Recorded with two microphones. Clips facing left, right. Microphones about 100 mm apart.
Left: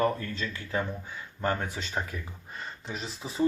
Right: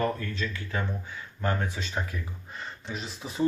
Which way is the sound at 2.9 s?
Centre (ahead or behind).